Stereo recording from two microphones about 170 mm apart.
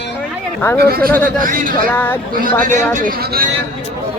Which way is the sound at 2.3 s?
50° right (ahead or behind).